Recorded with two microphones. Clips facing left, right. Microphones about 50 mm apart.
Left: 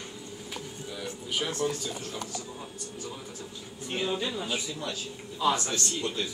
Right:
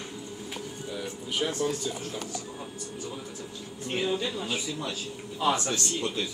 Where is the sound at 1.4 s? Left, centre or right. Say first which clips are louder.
Right 4 dB; centre.